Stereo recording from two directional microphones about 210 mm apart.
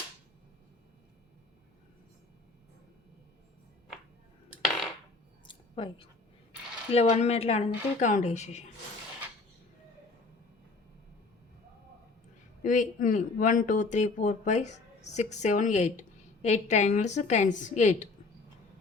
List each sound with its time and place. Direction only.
5.7 s speech: 25° left (ahead or behind)
12.6 s speech: 40° left (ahead or behind)